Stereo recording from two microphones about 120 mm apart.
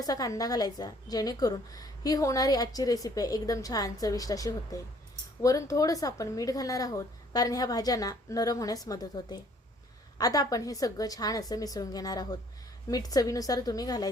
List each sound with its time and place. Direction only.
0.0 s a woman's voice: 30° left (ahead or behind)